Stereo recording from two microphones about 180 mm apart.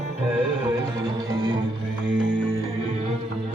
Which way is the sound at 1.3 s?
25° right (ahead or behind).